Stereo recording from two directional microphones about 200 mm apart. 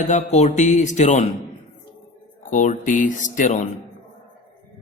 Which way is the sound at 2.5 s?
40° left (ahead or behind).